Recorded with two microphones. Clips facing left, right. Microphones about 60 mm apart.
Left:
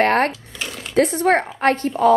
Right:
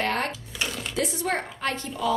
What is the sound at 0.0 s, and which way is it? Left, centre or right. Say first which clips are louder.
Speech: left 10 dB; left.